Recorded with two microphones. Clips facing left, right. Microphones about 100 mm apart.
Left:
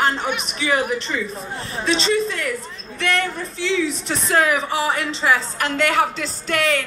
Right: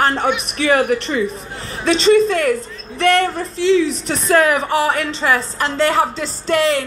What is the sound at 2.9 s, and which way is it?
A woman's voice, 45° right (ahead or behind).